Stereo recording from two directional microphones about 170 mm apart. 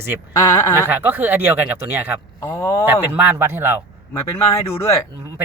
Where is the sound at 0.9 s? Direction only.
10° right (ahead or behind).